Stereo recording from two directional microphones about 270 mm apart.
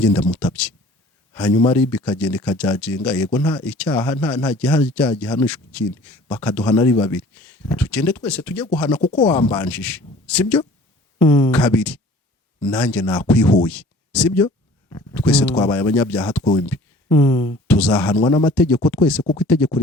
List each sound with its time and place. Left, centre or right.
0.0 s speech: centre
9.0 s speech: centre
9.5 s speech: centre
16.4 s speech: centre
18.2 s speech: centre
18.5 s speech: centre